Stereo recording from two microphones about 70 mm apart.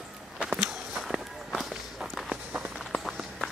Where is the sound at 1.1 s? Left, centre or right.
Centre.